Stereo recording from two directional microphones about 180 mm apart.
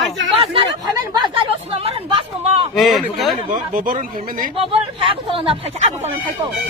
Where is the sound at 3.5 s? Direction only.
50° right (ahead or behind).